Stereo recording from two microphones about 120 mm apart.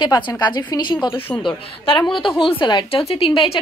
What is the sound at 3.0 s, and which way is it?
Speech, 50° left (ahead or behind).